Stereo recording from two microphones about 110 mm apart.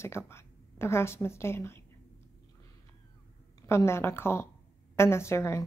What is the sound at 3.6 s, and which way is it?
Speech, 25° left (ahead or behind).